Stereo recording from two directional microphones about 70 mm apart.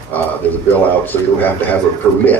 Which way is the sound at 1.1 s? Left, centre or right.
Left.